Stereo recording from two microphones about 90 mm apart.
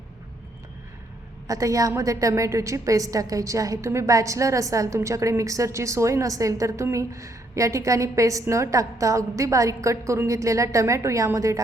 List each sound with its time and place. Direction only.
1.5 s a woman's voice: 40° right (ahead or behind)